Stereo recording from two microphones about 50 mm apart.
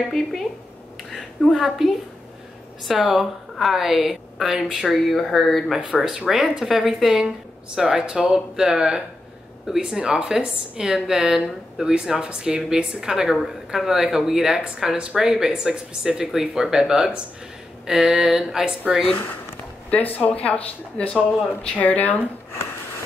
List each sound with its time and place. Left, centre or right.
0.1 s a woman's voice: centre
1.5 s a woman's voice: centre
4.8 s a woman's voice: centre
5.8 s speech: right
6.2 s a woman's voice: centre
19.9 s speech: left